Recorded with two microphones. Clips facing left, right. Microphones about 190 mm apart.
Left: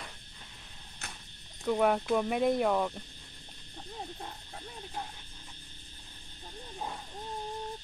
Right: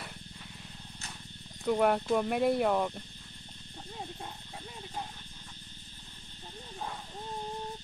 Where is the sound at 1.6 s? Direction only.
Centre (ahead or behind).